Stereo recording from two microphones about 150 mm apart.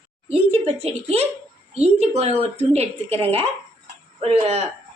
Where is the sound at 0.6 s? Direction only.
45° right (ahead or behind).